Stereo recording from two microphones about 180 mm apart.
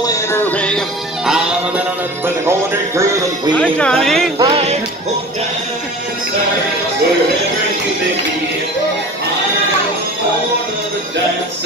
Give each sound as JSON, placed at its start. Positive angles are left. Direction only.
{"t": 0.0, "sound": "music", "side_deg": 15}
{"t": 3.5, "sound": "speech", "side_deg": 5}
{"t": 4.4, "sound": "music", "side_deg": -30}